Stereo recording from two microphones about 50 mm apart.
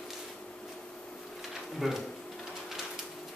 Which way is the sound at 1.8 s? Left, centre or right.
Centre.